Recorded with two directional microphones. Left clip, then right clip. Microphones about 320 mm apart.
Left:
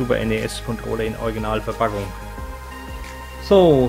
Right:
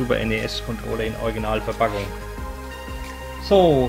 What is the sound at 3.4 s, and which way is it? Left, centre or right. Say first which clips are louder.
Speech: left 2 dB; centre.